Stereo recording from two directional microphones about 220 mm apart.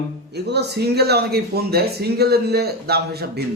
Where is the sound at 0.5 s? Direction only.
45° right (ahead or behind).